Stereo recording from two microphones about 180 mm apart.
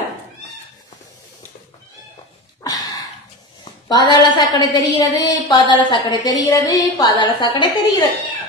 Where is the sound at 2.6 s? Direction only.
20° left (ahead or behind).